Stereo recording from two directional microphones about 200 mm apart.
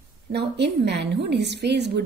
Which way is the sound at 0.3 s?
55° right (ahead or behind).